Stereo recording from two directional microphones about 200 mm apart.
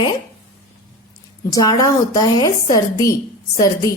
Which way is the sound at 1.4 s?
20° left (ahead or behind).